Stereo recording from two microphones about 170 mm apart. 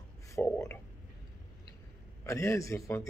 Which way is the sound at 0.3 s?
15° left (ahead or behind).